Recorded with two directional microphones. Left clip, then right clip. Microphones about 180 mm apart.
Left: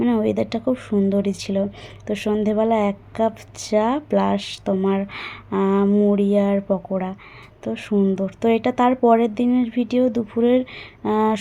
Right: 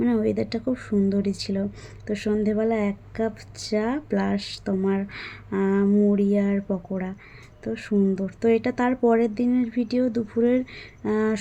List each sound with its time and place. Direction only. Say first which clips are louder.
0.0 s speech: left 3 dB; centre (ahead or behind)